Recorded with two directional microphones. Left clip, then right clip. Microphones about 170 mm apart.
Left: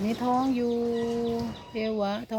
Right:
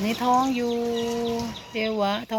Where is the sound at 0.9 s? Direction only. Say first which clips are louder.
Right 2 dB; 20° right (ahead or behind).